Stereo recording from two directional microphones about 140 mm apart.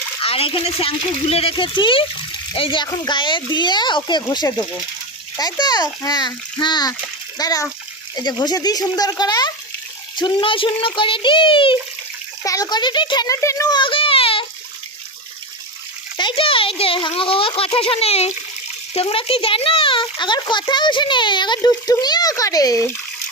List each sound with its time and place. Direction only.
0.2 s a child's voice: 40° left (ahead or behind)
12.4 s a child's voice: 25° left (ahead or behind); by 14.4 s 40° left (ahead or behind)
16.1 s a child's voice: 35° left (ahead or behind)